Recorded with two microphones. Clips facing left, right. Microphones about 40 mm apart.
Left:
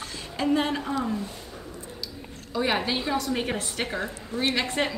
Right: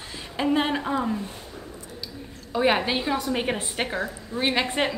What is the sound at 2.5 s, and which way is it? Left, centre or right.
A woman's voice, centre.